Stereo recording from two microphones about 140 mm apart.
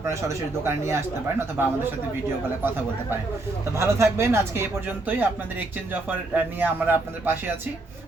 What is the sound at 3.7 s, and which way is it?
A man's voice, 20° right (ahead or behind).